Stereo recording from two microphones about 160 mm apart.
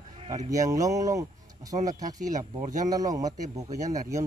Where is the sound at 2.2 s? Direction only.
50° right (ahead or behind).